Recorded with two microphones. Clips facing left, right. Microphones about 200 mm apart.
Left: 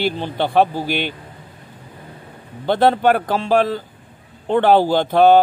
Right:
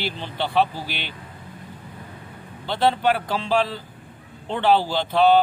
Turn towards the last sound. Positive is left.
turn(degrees=45)  # may be behind; listen again after turning